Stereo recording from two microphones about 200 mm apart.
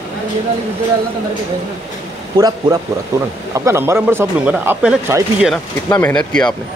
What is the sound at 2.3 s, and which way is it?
A man's voice, 20° right (ahead or behind).